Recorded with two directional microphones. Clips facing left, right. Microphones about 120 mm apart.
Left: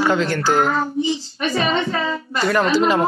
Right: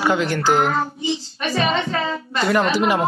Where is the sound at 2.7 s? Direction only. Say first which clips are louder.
Left 2 dB; 15° right (ahead or behind).